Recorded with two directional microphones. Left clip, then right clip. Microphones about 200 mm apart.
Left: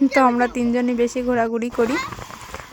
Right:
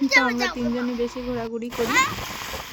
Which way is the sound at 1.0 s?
30° left (ahead or behind).